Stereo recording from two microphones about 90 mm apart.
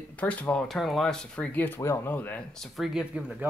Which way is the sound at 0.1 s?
15° left (ahead or behind).